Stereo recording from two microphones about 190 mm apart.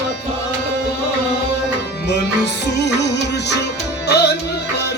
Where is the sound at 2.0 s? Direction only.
60° left (ahead or behind).